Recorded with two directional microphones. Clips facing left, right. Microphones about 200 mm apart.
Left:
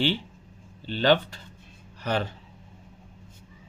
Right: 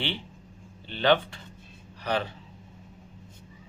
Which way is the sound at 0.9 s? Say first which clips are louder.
Left 1 dB; 40° left (ahead or behind).